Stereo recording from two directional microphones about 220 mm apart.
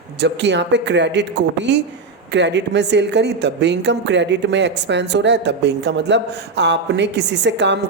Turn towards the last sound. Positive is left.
turn(degrees=-50)  # may be behind; listen again after turning